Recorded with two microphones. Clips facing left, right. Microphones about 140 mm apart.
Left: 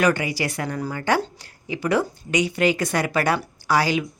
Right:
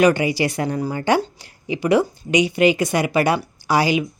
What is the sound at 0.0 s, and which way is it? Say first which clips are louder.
A woman's voice: right 5 dB; 20° right (ahead or behind).